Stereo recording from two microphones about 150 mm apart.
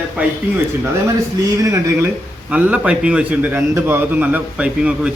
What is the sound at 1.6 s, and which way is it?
Speech, 20° right (ahead or behind).